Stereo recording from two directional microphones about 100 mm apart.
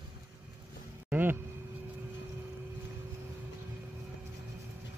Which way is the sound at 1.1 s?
20° right (ahead or behind).